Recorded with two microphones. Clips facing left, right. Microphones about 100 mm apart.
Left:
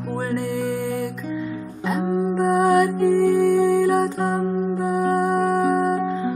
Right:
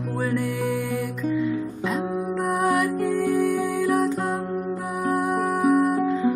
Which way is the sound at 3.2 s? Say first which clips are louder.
Left 5 dB; 30° left (ahead or behind).